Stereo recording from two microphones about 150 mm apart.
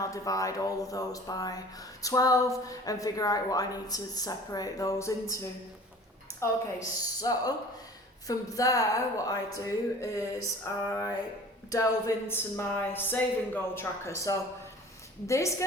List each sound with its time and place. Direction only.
0.0 s speech: 20° left (ahead or behind)
6.9 s speech: 25° left (ahead or behind)